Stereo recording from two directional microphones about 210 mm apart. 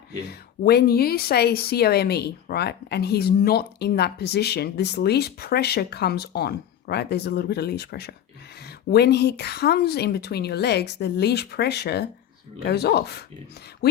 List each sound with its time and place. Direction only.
0.3 s speech: 50° left (ahead or behind)